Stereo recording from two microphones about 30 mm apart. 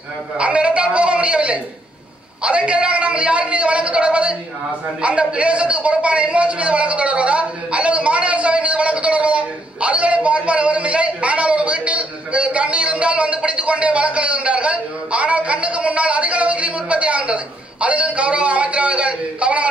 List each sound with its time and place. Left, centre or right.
0.4 s a man's voice: right